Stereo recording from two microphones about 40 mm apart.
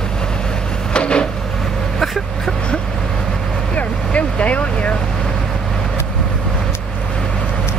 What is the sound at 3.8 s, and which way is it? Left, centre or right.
Vehicle, left.